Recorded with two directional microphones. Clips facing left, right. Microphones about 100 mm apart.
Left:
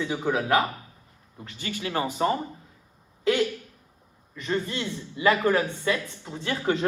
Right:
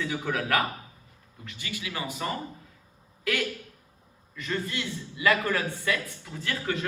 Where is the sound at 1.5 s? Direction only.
40° left (ahead or behind).